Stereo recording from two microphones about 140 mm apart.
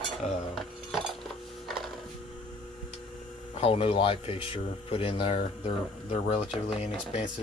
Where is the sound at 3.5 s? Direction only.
45° left (ahead or behind).